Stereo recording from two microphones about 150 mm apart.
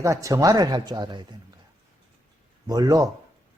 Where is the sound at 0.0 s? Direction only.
20° right (ahead or behind).